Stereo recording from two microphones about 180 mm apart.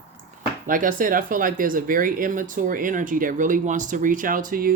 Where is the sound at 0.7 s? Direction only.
50° right (ahead or behind).